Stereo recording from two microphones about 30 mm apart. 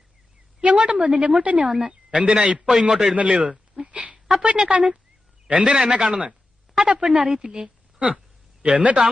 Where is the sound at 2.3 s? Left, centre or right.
Right.